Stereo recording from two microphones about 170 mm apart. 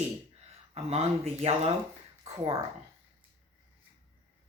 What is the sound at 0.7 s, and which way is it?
Speech, 40° right (ahead or behind).